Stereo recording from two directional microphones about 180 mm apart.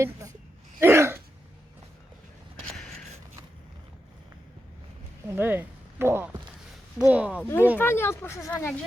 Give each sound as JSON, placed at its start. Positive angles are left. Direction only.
{"t": 0.0, "sound": "a sound", "side_deg": -15}
{"t": 0.8, "sound": "throat clearing", "side_deg": -15}
{"t": 5.3, "sound": "speech", "side_deg": -10}
{"t": 7.4, "sound": "speech", "side_deg": 10}